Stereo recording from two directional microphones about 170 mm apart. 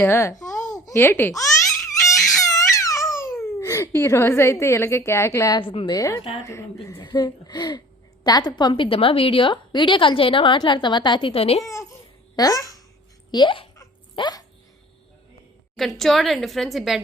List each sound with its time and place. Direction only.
0.0 s speech: 15° left (ahead or behind)
2.1 s crying: 20° left (ahead or behind)
5.5 s a woman's voice: 30° left (ahead or behind)
11.6 s a child's voice: 15° left (ahead or behind)
13.7 s a sound: 25° left (ahead or behind)
15.7 s a woman's voice: centre (ahead or behind)